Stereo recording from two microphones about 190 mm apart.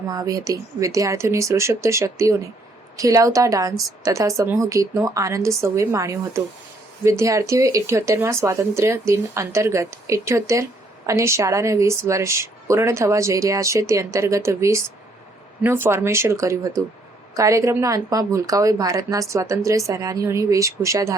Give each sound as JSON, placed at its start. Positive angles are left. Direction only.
{"t": 0.1, "sound": "speech", "side_deg": -20}